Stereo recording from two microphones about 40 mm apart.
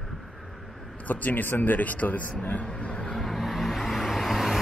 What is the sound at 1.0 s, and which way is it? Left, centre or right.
Speech, left.